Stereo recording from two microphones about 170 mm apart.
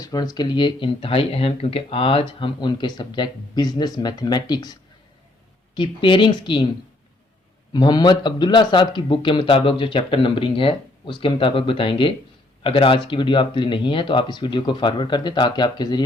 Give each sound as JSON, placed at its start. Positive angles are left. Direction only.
{"t": 0.0, "sound": "speech", "side_deg": 20}
{"t": 7.7, "sound": "speech", "side_deg": 25}